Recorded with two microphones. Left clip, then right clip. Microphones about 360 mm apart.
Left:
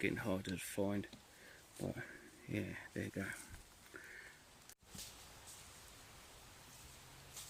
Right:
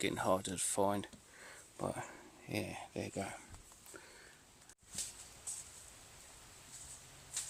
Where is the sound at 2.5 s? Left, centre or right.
Centre.